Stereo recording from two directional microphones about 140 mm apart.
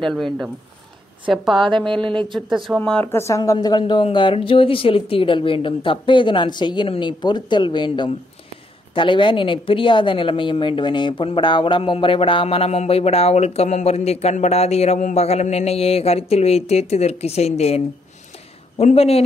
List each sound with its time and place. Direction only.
0.0 s speech: centre (ahead or behind)
2.0 s speech: 35° right (ahead or behind)
2.5 s speech: 5° right (ahead or behind)
2.8 s speech: 10° left (ahead or behind)
3.5 s a woman's voice: 35° left (ahead or behind)